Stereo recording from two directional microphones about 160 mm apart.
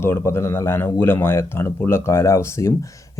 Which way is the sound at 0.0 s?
15° left (ahead or behind).